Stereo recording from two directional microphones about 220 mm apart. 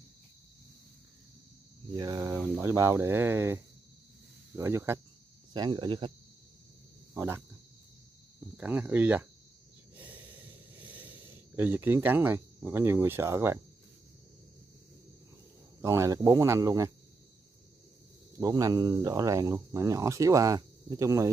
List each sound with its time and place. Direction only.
2.0 s speech: 15° right (ahead or behind)
7.2 s speech: 10° right (ahead or behind)
8.5 s speech: 5° right (ahead or behind)
9.9 s snort: 5° right (ahead or behind)
10.8 s speech: 5° right (ahead or behind)
15.8 s speech: 15° right (ahead or behind)
18.4 s speech: 15° right (ahead or behind)